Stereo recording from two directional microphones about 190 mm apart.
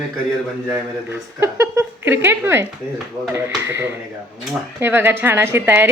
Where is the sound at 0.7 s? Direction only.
15° right (ahead or behind).